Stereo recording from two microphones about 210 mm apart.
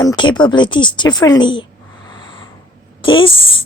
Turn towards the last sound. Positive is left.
turn(degrees=25)  # may be behind; listen again after turning